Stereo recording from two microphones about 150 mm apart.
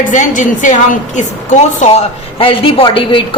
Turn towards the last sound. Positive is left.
turn(degrees=35)  # may be behind; listen again after turning